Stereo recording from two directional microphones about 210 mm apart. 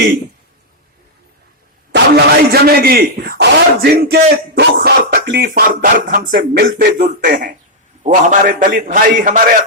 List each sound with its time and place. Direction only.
1.9 s a man's voice: 50° right (ahead or behind)